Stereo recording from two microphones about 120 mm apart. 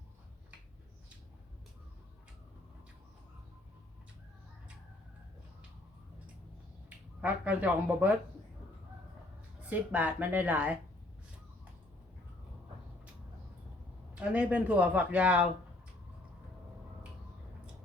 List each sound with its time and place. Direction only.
7.2 s speech: 10° right (ahead or behind)
9.6 s speech: 15° right (ahead or behind)
14.2 s speech: 10° right (ahead or behind)